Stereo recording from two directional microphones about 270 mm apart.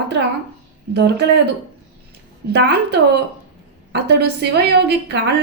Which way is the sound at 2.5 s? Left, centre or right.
Right.